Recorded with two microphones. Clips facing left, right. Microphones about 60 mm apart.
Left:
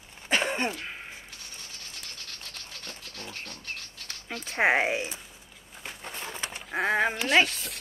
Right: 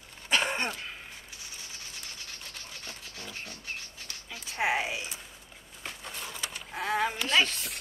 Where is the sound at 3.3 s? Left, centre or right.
Centre.